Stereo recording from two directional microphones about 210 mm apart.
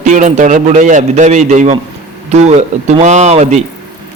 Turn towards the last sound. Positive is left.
turn(degrees=-30)  # may be behind; listen again after turning